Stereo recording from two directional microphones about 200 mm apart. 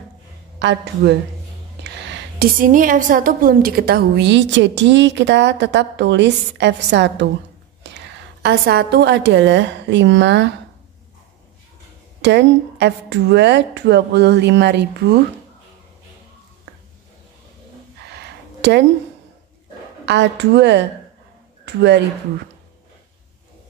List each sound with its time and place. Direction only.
0.6 s a woman's voice: 60° right (ahead or behind)
12.2 s a woman's voice: 60° right (ahead or behind)
18.1 s a sound: 60° right (ahead or behind)
20.1 s a woman's voice: 60° right (ahead or behind)